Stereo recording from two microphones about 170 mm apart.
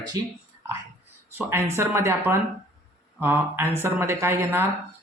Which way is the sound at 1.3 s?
15° right (ahead or behind).